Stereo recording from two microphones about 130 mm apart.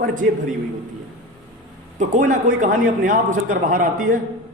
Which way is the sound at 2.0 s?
80° right.